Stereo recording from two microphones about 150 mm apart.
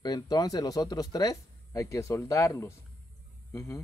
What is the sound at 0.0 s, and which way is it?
Speech, 25° left (ahead or behind).